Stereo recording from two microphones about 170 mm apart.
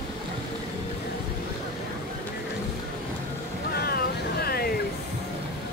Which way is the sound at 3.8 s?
65° left (ahead or behind).